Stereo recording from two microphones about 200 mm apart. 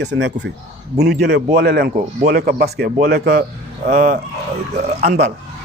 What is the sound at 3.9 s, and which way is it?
Speech, 40° right (ahead or behind).